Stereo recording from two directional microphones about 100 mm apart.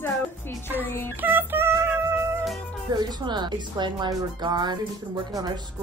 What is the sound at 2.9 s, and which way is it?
Speech, 45° right (ahead or behind).